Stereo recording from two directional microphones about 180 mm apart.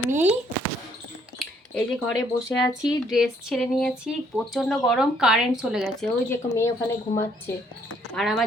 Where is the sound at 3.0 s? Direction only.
Centre (ahead or behind).